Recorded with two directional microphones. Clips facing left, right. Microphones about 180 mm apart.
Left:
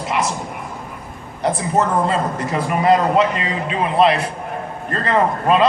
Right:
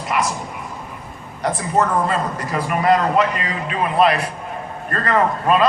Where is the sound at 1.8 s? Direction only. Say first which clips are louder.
Left 1 dB; 25° left (ahead or behind).